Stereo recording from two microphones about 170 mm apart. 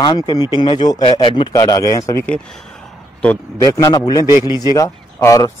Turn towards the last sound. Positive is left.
turn(degrees=20)  # may be behind; listen again after turning